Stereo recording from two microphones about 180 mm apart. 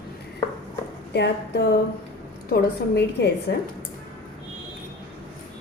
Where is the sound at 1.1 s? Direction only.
70° left (ahead or behind).